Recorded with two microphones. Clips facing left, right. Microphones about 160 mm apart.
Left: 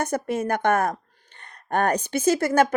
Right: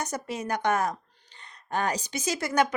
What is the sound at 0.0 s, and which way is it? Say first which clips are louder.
Speech: left 7 dB; 55° left (ahead or behind).